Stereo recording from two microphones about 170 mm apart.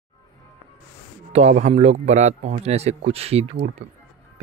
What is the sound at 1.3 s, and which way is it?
Speech, 40° right (ahead or behind).